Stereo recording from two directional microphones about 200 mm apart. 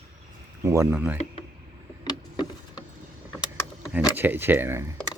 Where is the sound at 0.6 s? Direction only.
15° right (ahead or behind).